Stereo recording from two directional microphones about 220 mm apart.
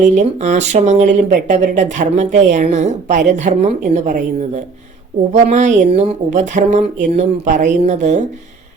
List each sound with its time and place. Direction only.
0.0 s speech: 30° right (ahead or behind)